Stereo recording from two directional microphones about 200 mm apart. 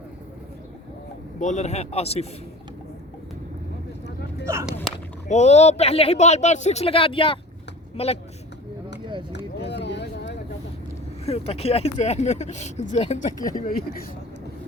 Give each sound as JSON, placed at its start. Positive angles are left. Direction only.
{"t": 1.4, "sound": "speech", "side_deg": 35}
{"t": 4.4, "sound": "speech", "side_deg": -15}
{"t": 5.3, "sound": "speech", "side_deg": 35}
{"t": 9.3, "sound": "a sound", "side_deg": 60}
{"t": 11.3, "sound": "speech", "side_deg": 30}
{"t": 13.4, "sound": "speech", "side_deg": 20}